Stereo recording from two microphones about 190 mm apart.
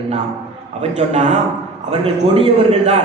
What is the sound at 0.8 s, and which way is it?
A man's voice, 35° right (ahead or behind).